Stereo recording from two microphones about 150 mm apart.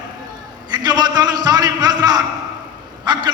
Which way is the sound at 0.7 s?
30° right (ahead or behind).